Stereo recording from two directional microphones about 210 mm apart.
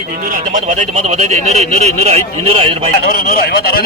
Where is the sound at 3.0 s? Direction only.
45° left (ahead or behind).